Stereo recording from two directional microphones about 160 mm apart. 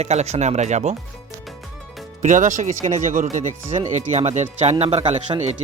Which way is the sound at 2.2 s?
50° right (ahead or behind).